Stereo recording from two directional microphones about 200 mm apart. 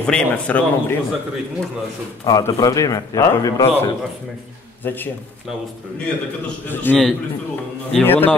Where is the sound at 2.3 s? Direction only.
20° left (ahead or behind).